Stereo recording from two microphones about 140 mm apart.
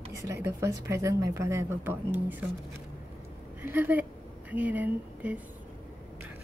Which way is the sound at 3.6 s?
15° right (ahead or behind).